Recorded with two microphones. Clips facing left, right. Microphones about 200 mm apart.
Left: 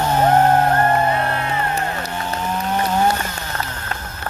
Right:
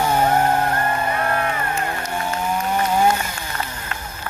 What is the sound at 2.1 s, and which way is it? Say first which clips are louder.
Chainsaw: right 4 dB; 10° right (ahead or behind).